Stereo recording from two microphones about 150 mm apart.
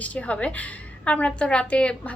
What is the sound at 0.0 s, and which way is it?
A woman's voice, 10° left (ahead or behind).